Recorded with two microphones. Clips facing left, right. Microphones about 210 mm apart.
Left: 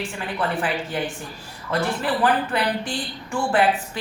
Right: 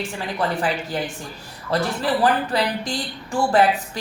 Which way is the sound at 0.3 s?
40° right (ahead or behind).